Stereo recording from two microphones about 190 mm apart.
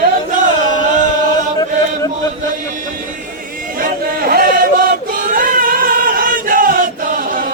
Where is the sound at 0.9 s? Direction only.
40° right (ahead or behind).